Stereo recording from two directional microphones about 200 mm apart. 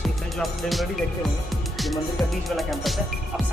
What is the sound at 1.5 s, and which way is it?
Speech, centre (ahead or behind).